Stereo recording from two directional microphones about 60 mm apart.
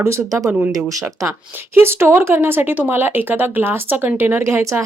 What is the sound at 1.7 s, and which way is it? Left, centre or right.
Speech, right.